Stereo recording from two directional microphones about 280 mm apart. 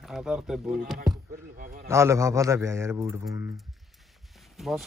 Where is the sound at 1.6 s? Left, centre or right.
Right.